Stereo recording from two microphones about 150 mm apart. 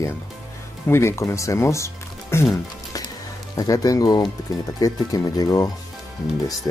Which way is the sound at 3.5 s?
25° left (ahead or behind).